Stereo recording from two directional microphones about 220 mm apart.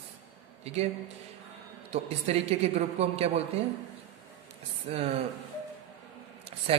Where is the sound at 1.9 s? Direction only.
30° right (ahead or behind).